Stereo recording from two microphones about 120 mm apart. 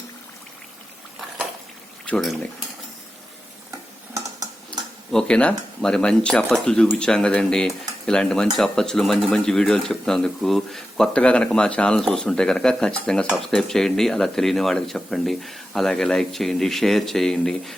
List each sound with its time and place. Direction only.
2.0 s speech: 10° left (ahead or behind)
4.1 s typing: 30° right (ahead or behind)
5.1 s speech: 10° left (ahead or behind)